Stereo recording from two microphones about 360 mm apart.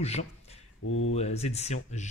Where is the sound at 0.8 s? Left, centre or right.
Left.